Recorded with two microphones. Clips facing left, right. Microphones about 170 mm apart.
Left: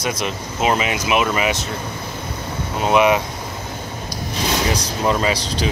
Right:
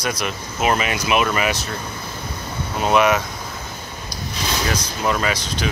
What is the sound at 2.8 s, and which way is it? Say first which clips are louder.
Speech: left 1 dB; 15° left (ahead or behind).